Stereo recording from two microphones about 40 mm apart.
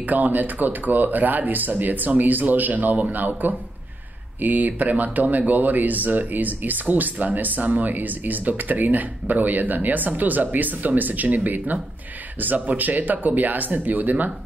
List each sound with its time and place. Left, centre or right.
0.0 s speech: right